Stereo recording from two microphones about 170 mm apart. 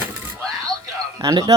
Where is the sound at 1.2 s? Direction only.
25° right (ahead or behind).